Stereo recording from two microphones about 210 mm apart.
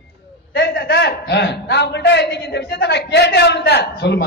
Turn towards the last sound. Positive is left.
turn(degrees=50)  # may be behind; listen again after turning